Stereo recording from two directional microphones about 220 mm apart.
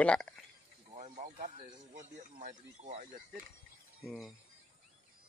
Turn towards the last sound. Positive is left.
turn(degrees=0)  # may be behind; listen again after turning